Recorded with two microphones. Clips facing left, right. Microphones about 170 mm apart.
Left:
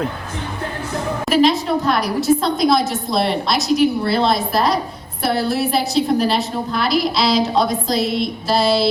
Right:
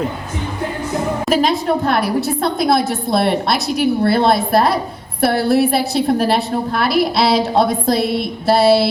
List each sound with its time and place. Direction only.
1.3 s a woman's voice: 50° right (ahead or behind)